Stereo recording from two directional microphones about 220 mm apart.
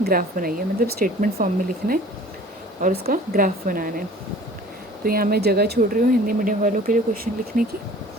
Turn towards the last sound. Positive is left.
turn(degrees=-40)  # may be behind; listen again after turning